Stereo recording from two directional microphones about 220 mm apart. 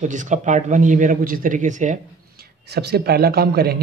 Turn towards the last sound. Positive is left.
turn(degrees=-45)  # may be behind; listen again after turning